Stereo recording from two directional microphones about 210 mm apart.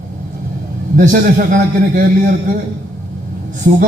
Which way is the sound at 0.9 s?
35° right (ahead or behind).